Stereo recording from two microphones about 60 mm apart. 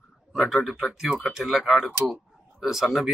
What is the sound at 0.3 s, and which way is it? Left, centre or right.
Speech, centre.